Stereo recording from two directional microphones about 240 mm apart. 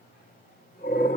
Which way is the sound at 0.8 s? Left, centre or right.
Left.